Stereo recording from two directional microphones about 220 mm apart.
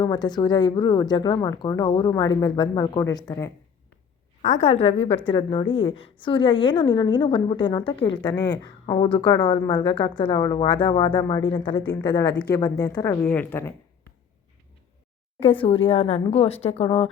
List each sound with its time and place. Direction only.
0.0 s speech: 20° left (ahead or behind)
4.4 s a woman's voice: 30° left (ahead or behind); by 13.7 s 10° left (ahead or behind)
15.4 s speech: 25° left (ahead or behind)